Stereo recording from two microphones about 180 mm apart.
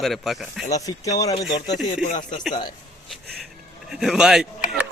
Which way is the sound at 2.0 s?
45° left (ahead or behind).